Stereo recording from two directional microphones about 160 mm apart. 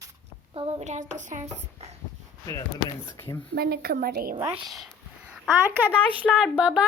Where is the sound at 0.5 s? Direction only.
40° right (ahead or behind).